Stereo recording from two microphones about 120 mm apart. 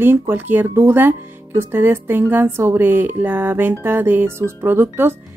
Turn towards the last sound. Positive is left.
turn(degrees=-20)  # may be behind; listen again after turning